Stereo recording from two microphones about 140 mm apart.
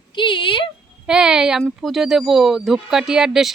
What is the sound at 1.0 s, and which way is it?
Speech, 5° right (ahead or behind).